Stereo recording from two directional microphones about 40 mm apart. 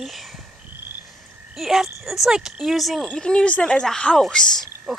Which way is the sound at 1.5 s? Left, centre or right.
Centre.